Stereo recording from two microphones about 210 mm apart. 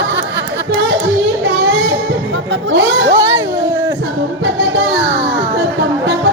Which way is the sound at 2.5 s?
60° right (ahead or behind).